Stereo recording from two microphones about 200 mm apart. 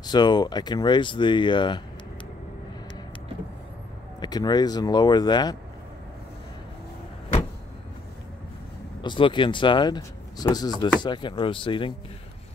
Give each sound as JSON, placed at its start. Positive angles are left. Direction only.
{"t": 0.0, "sound": "speech", "side_deg": 20}
{"t": 4.2, "sound": "speech", "side_deg": 20}
{"t": 9.0, "sound": "speech", "side_deg": 25}